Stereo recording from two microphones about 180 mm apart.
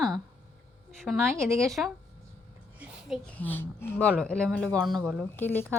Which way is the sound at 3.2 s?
10° left (ahead or behind).